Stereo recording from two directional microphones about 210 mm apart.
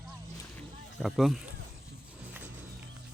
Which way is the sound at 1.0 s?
Centre (ahead or behind).